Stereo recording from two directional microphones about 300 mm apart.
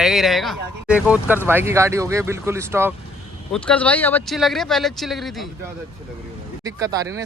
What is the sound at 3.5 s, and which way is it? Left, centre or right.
Speech, centre.